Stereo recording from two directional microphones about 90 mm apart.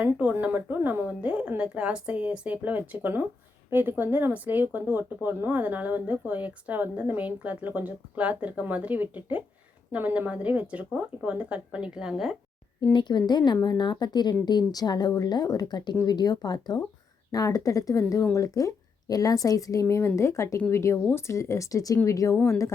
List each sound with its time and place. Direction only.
0.0 s a woman's voice: 15° right (ahead or behind)
12.9 s speech: 60° left (ahead or behind)
17.3 s a woman's voice: 40° left (ahead or behind)